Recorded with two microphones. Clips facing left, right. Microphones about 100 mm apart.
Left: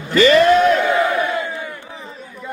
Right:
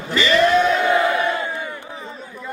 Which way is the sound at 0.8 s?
20° right (ahead or behind).